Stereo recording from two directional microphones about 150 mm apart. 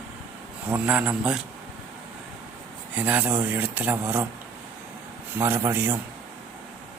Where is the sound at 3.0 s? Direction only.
10° right (ahead or behind).